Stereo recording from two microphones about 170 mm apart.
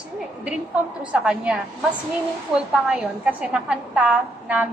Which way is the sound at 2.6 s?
5° right (ahead or behind).